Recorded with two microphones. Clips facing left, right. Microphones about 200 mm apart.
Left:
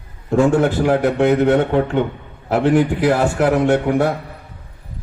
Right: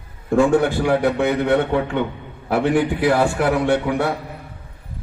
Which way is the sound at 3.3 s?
50° left (ahead or behind).